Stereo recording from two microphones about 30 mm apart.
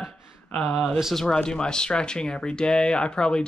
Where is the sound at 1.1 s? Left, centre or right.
Left.